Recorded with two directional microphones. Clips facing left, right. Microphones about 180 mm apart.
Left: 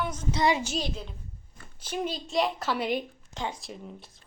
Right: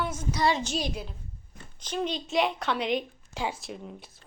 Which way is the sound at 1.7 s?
10° left (ahead or behind).